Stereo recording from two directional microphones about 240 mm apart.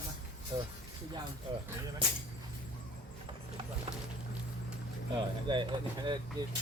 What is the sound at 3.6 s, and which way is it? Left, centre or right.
Speech, centre.